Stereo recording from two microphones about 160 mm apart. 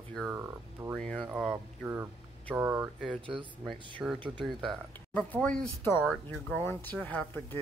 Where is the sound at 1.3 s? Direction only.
10° right (ahead or behind).